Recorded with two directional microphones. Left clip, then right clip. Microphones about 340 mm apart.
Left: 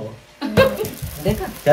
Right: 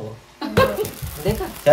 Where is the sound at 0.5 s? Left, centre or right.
Centre.